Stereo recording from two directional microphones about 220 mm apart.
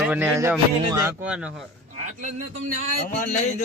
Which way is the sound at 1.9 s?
35° right (ahead or behind).